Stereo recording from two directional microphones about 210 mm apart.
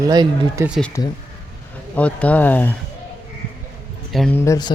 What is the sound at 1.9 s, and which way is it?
Speech, 5° left (ahead or behind).